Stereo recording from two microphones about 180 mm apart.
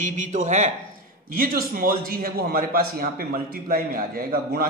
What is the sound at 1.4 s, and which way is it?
A man's voice, 55° right (ahead or behind).